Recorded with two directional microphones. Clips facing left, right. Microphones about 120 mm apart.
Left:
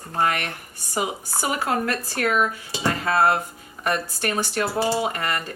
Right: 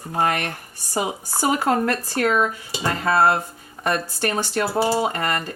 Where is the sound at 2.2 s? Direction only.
30° right (ahead or behind).